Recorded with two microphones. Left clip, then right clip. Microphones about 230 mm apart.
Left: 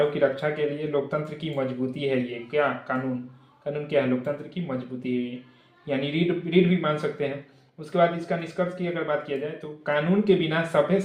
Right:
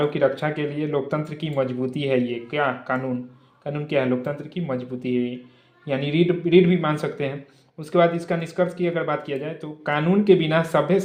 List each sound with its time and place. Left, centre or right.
0.1 s speech: right